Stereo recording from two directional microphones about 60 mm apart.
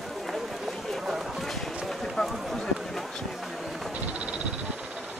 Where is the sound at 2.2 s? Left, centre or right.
Centre.